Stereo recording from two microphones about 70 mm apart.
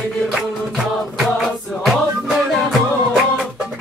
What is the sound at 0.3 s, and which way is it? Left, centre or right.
Music, centre.